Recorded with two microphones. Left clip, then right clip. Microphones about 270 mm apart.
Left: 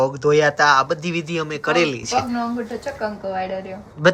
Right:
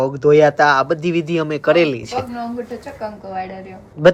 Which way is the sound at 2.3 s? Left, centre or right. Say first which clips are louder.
Left 1 dB; left.